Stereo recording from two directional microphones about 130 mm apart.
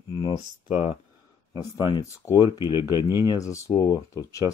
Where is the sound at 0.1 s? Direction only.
35° left (ahead or behind).